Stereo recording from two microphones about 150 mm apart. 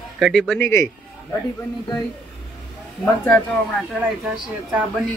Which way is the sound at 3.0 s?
10° left (ahead or behind).